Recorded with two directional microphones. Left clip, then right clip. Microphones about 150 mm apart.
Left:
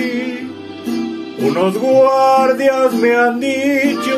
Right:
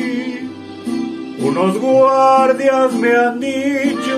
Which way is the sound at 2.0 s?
Centre (ahead or behind).